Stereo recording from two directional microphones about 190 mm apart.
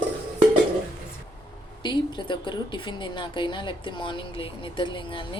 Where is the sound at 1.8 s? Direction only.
25° left (ahead or behind).